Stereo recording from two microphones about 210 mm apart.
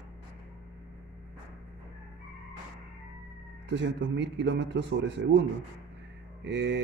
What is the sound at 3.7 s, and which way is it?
Speech, 60° right (ahead or behind).